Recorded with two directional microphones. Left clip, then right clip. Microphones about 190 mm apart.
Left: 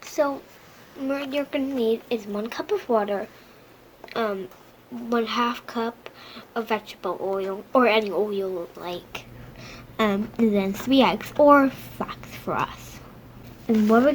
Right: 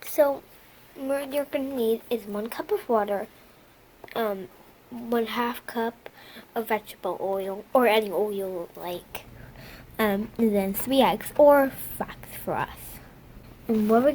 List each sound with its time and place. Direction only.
0.2 s a child's voice: 35° right (ahead or behind)
1.0 s speech: 25° right (ahead or behind)
13.8 s speech: 25° right (ahead or behind)